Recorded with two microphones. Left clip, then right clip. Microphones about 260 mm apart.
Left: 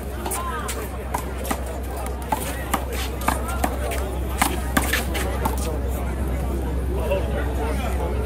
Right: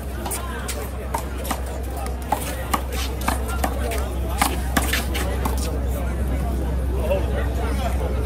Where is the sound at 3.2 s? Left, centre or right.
Centre.